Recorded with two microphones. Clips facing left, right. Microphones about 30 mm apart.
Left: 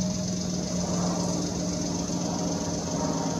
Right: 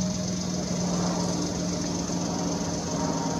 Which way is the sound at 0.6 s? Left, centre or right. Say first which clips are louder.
Right 1 dB; centre.